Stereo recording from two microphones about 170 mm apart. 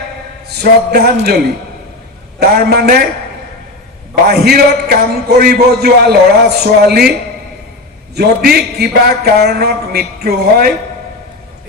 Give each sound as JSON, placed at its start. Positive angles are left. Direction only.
{"t": 0.4, "sound": "a man's voice", "side_deg": -70}
{"t": 2.4, "sound": "a man's voice", "side_deg": -65}
{"t": 4.1, "sound": "a man's voice", "side_deg": -70}
{"t": 8.1, "sound": "a man's voice", "side_deg": -70}